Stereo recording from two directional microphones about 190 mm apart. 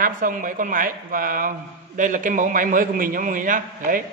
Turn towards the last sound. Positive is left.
turn(degrees=-45)  # may be behind; listen again after turning